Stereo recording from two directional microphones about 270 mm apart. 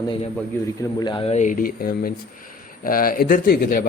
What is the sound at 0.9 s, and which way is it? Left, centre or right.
Speech, centre.